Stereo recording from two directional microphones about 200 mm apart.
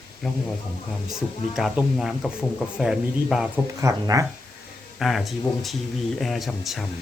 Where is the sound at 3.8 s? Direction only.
15° right (ahead or behind).